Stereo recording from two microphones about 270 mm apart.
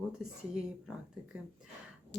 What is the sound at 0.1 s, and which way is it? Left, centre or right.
Speech, centre.